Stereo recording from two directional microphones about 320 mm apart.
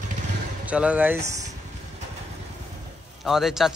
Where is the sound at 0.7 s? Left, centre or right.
Centre.